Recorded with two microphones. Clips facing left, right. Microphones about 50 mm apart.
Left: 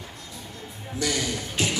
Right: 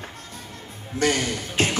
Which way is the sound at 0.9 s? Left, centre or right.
Right.